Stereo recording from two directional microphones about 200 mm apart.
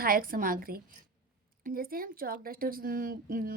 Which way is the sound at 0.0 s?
45° right (ahead or behind).